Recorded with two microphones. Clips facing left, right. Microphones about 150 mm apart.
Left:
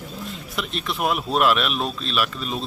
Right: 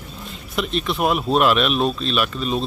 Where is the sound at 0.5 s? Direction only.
Centre (ahead or behind).